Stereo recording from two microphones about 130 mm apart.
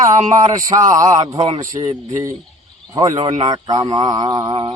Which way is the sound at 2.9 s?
25° right (ahead or behind).